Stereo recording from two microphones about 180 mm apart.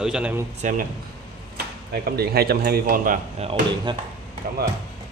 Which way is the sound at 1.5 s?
60° right (ahead or behind).